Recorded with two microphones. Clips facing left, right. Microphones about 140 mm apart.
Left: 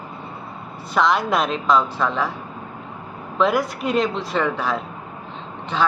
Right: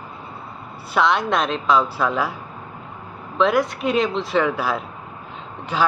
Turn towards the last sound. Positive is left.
turn(degrees=-10)  # may be behind; listen again after turning